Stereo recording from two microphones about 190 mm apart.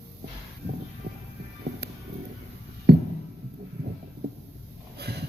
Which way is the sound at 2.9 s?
60° right (ahead or behind).